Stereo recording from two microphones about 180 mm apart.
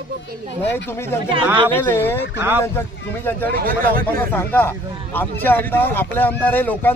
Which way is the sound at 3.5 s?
55° right (ahead or behind).